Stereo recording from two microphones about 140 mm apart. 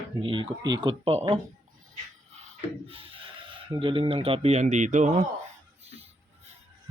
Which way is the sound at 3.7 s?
35° right (ahead or behind).